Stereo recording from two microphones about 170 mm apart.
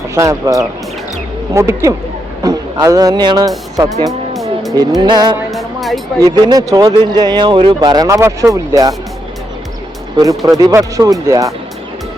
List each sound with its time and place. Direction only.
0.1 s speech: 20° right (ahead or behind)
4.9 s speech: 25° right (ahead or behind)
5.5 s music: centre (ahead or behind)
6.1 s speech: 20° right (ahead or behind)
10.2 s speech: 20° right (ahead or behind)